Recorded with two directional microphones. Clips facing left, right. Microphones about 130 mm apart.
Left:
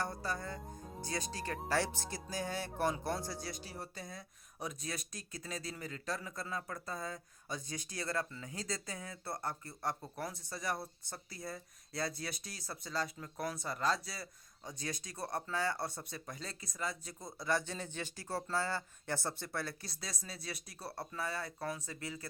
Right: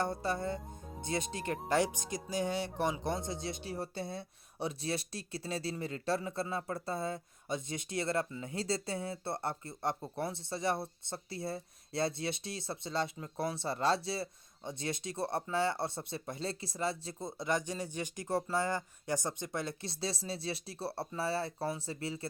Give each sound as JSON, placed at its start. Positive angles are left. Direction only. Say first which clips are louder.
{"t": 0.0, "sound": "speech", "louder": "right 5 dB", "side_deg": -25}